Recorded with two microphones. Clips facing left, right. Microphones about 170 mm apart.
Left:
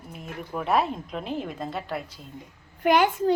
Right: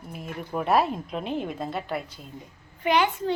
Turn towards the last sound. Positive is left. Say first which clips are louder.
# left 3 dB
turn(degrees=45)  # may be behind; listen again after turning